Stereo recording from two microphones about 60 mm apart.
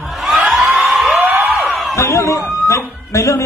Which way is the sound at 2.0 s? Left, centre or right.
Left.